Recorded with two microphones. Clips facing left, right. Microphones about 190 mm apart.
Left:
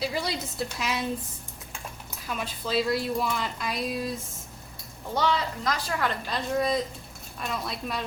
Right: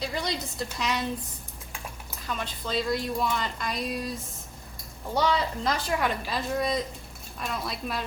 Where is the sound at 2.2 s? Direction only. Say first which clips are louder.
Left 1 dB; 5° left (ahead or behind).